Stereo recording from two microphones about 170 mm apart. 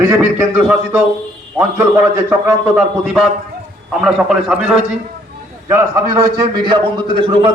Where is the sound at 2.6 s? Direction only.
5° right (ahead or behind).